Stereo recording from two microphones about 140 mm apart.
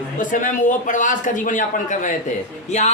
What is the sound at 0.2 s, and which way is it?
A man's voice, 65° left (ahead or behind).